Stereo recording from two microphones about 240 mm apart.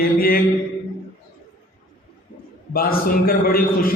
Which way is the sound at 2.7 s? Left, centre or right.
Left.